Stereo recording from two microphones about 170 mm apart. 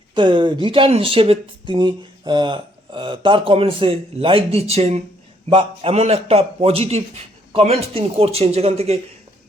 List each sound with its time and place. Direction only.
0.1 s speech: 30° right (ahead or behind)